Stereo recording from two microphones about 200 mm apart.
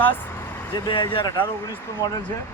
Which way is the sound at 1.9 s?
15° left (ahead or behind).